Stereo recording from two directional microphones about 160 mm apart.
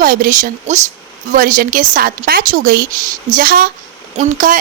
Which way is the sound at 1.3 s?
60° right (ahead or behind).